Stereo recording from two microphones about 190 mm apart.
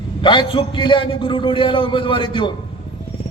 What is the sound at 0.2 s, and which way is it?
A man's voice, 25° left (ahead or behind).